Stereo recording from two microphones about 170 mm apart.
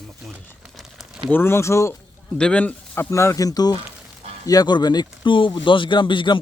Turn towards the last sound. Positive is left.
turn(degrees=30)  # may be behind; listen again after turning